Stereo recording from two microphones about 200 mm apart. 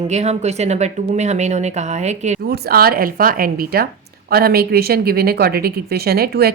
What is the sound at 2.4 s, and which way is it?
Speech, 50° right (ahead or behind).